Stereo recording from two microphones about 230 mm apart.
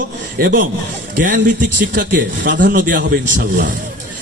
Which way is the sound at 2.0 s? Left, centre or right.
Right.